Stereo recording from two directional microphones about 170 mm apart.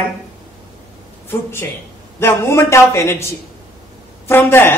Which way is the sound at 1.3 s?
15° left (ahead or behind).